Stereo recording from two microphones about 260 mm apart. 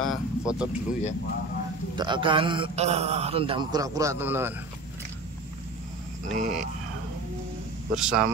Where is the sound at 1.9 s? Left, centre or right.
Centre.